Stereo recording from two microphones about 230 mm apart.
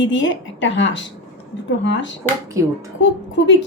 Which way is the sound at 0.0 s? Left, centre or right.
Left.